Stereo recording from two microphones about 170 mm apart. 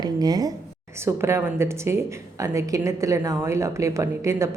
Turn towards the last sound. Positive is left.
turn(degrees=-15)  # may be behind; listen again after turning